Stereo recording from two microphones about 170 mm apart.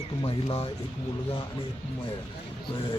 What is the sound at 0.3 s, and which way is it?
Speech, 35° left (ahead or behind).